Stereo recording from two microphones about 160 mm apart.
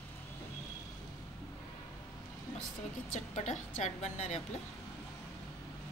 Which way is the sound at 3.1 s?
45° left (ahead or behind).